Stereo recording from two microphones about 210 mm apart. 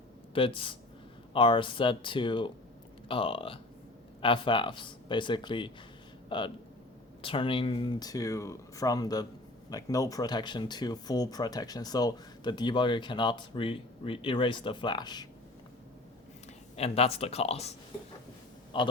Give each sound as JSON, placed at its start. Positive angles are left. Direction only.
{"t": 0.3, "sound": "speech", "side_deg": 25}
{"t": 16.7, "sound": "speech", "side_deg": 30}